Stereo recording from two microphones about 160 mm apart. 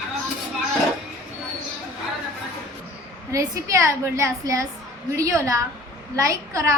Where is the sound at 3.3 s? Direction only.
20° right (ahead or behind).